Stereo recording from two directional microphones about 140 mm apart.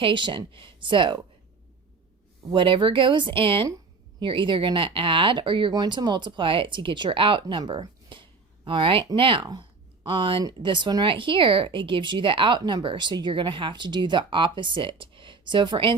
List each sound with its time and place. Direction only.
0.0 s speech: 35° right (ahead or behind)
2.5 s speech: 35° right (ahead or behind)
9.5 s a sound: 30° right (ahead or behind)
10.4 s speech: 35° right (ahead or behind)